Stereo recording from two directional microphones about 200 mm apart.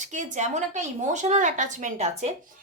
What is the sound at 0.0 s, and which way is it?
A woman's voice, 35° right (ahead or behind).